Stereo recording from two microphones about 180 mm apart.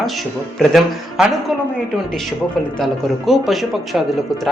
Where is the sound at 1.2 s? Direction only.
Centre (ahead or behind).